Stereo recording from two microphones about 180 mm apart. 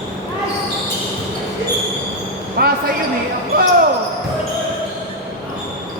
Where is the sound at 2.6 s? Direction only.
60° right (ahead or behind).